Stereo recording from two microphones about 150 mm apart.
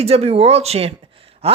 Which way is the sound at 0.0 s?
40° right (ahead or behind).